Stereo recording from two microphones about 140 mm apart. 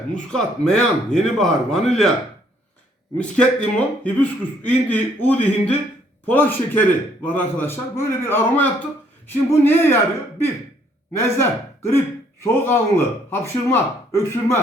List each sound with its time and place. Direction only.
0.1 s speech: 5° left (ahead or behind)
3.2 s speech: 5° left (ahead or behind)
11.1 s speech: 20° left (ahead or behind)